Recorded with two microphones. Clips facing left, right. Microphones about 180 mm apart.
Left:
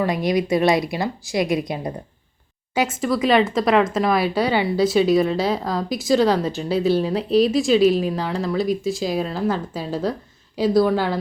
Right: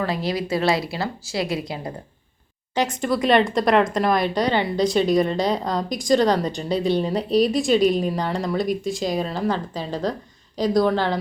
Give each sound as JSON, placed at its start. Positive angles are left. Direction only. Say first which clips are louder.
{"t": 0.0, "sound": "speech", "louder": "left 4 dB", "side_deg": 15}
{"t": 2.7, "sound": "speech", "louder": "left 1 dB", "side_deg": 5}